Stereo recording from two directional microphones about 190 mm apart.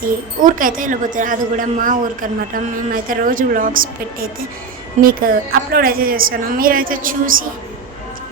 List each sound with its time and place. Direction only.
0.4 s a woman's voice: 45° right (ahead or behind)